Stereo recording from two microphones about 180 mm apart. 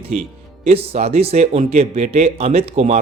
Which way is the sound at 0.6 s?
35° right (ahead or behind).